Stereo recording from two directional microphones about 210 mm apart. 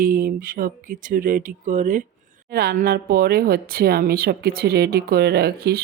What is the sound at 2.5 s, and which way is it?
Speech, 50° right (ahead or behind).